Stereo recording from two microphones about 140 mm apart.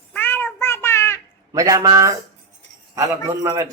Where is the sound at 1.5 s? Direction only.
25° right (ahead or behind).